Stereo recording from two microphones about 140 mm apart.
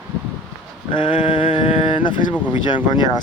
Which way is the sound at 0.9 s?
35° left (ahead or behind).